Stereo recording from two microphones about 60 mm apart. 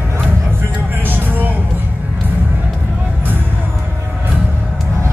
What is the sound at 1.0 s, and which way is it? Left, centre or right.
Vehicle, right.